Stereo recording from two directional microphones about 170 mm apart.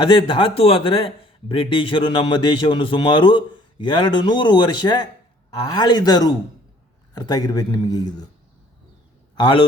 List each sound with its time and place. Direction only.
0.0 s speech: 30° left (ahead or behind)
9.3 s a man's voice: 30° left (ahead or behind)